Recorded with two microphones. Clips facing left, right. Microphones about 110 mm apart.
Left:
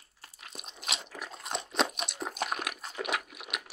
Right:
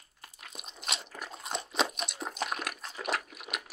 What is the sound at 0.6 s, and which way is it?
Crunch, centre (ahead or behind).